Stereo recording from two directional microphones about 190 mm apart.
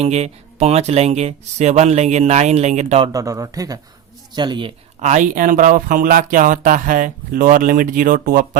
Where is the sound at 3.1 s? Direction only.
15° right (ahead or behind); by 8.4 s 50° right (ahead or behind).